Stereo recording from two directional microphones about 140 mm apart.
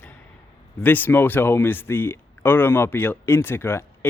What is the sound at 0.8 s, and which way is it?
Speech, 15° left (ahead or behind).